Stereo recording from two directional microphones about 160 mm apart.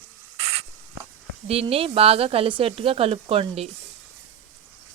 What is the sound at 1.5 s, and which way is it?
Speech, 35° right (ahead or behind).